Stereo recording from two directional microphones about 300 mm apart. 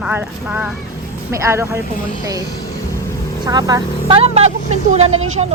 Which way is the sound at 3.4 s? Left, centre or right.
Centre.